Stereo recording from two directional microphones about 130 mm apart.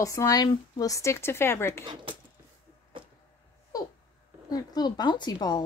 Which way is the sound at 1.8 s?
40° right (ahead or behind).